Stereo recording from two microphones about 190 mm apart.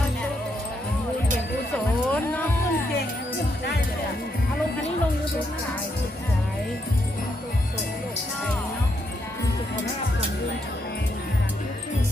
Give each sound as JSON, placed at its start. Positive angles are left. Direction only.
{"t": 1.7, "sound": "music", "side_deg": 10}